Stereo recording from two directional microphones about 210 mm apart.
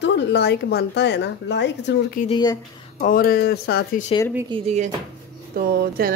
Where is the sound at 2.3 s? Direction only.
20° left (ahead or behind).